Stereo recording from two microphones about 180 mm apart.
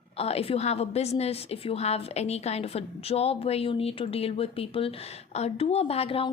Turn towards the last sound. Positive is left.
turn(degrees=30)  # may be behind; listen again after turning